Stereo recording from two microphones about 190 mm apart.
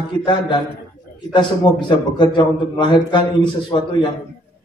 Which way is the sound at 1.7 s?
25° left (ahead or behind).